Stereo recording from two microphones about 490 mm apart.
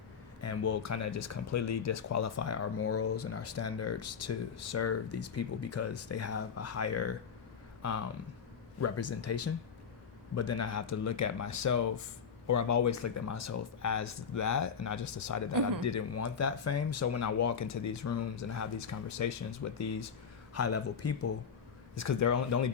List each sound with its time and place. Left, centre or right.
0.4 s speech: left